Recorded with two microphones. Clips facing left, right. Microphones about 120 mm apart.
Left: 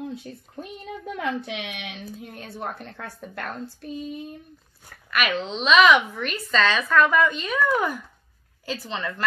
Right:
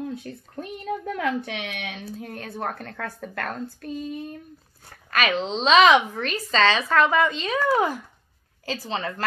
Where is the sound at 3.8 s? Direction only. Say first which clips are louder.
Even; 50° right (ahead or behind).